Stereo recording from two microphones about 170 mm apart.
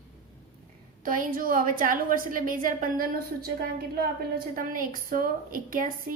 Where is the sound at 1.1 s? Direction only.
55° right (ahead or behind).